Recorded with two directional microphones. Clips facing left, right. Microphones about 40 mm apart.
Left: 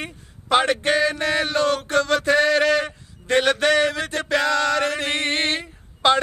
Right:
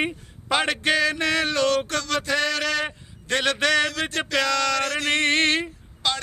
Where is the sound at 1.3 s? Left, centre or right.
Left.